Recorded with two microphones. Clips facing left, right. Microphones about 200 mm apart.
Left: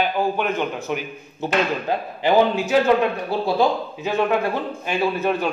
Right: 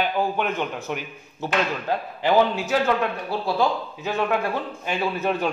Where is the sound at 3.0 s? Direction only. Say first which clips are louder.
Left 4 dB; 20° left (ahead or behind).